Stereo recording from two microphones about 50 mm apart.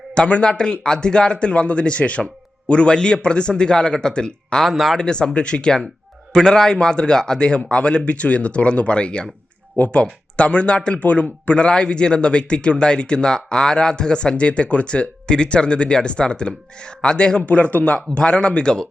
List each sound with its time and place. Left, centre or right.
0.1 s speech: centre
4.6 s speech: centre
4.9 s speech: centre